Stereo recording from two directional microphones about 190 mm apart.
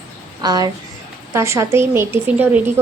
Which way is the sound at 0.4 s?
20° right (ahead or behind).